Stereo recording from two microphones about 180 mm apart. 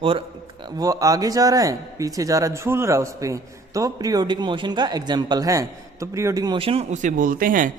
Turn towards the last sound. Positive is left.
turn(degrees=-50)  # may be behind; listen again after turning